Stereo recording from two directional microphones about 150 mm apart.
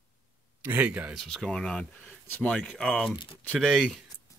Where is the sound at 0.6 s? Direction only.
15° right (ahead or behind).